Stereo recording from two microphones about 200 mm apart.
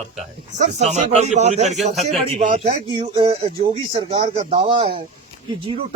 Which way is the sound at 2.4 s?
45° right (ahead or behind).